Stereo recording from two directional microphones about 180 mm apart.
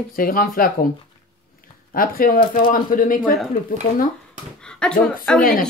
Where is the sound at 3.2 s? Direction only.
Centre (ahead or behind).